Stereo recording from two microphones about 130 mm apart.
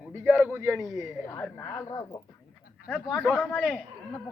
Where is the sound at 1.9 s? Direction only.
30° left (ahead or behind).